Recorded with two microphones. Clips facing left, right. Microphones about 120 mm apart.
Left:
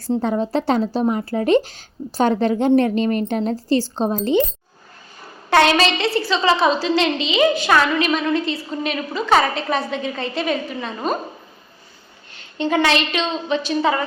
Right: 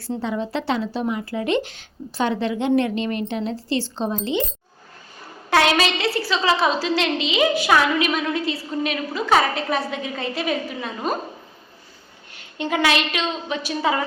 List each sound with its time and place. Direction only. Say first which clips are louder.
0.2 s speech: left 5 dB; 45° left (ahead or behind)
5.5 s a woman's voice: left 3 dB; 5° right (ahead or behind)
12.3 s a woman's voice: left 4 dB; 10° right (ahead or behind)